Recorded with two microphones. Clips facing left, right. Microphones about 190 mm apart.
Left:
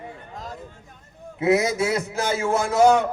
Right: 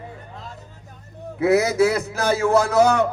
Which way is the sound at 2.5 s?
70° right (ahead or behind).